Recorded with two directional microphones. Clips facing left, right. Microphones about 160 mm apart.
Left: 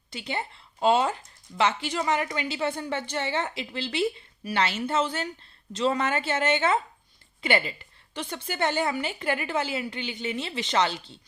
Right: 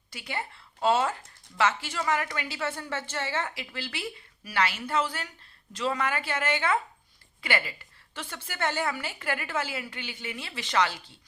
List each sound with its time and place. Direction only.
0.1 s speech: 25° left (ahead or behind)